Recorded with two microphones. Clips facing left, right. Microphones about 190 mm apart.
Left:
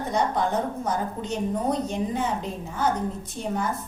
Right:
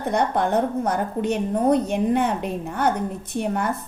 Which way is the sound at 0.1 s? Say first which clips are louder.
Right 4 dB; 60° right (ahead or behind).